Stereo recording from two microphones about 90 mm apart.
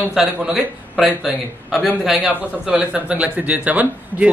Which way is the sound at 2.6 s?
15° right (ahead or behind).